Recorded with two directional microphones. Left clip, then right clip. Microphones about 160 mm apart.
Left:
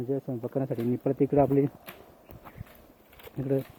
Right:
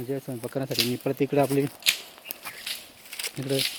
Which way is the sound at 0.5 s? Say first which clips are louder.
Right 4 dB; 10° right (ahead or behind).